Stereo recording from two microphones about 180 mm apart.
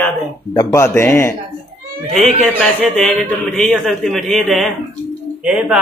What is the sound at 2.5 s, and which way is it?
A man's voice, 5° left (ahead or behind).